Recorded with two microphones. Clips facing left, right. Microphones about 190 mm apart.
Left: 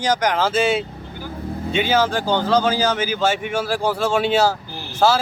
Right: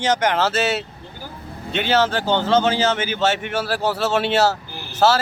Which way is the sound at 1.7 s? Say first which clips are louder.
Even; 10° left (ahead or behind).